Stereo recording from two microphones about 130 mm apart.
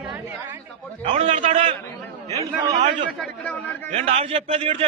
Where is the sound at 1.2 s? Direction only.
45° right (ahead or behind).